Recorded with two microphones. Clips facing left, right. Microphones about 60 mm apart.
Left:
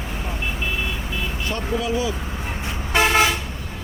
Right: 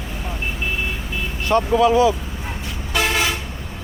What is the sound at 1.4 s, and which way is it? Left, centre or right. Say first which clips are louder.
Speech: right 11 dB; right.